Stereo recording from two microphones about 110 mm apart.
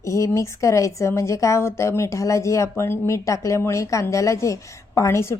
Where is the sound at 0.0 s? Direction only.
30° left (ahead or behind).